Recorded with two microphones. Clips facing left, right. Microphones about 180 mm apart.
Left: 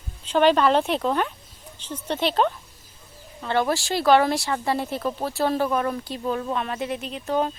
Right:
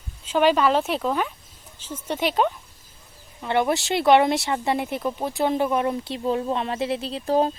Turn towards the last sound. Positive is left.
turn(degrees=-35)  # may be behind; listen again after turning